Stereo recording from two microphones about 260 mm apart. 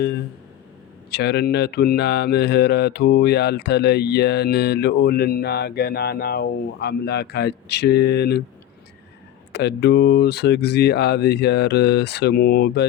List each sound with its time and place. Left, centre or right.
0.0 s speech: left
9.5 s speech: left